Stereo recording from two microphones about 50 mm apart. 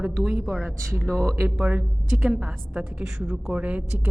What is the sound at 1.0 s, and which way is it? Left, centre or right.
Speech, centre.